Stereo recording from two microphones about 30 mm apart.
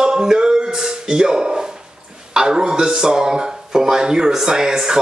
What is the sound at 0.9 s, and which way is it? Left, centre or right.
A man's voice, right.